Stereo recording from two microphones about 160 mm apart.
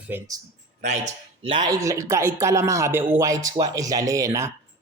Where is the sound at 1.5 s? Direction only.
25° right (ahead or behind).